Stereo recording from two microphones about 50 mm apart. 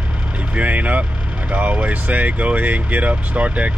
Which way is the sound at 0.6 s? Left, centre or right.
Right.